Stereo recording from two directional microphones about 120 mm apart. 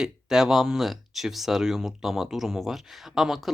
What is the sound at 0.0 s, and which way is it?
Speech, 5° right (ahead or behind).